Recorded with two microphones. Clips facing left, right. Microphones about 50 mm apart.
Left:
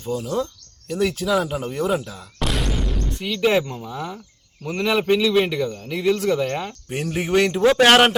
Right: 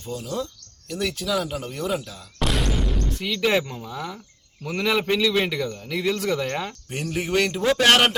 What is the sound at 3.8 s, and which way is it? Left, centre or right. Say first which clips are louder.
Speech: left 2 dB; centre.